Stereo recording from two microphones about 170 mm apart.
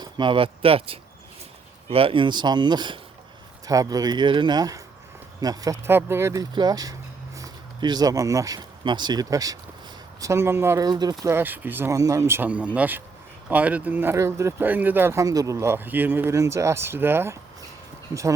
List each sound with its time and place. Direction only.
0.0 s speech: 30° right (ahead or behind)